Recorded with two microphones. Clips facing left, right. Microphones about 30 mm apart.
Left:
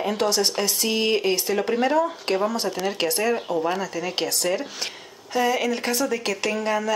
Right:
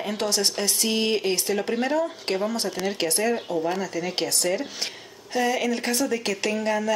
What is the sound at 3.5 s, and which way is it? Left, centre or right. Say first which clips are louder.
Speech: left 2 dB; centre.